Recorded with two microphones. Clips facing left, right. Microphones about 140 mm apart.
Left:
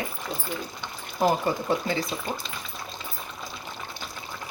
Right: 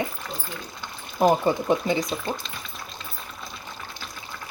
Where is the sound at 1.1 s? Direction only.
20° right (ahead or behind).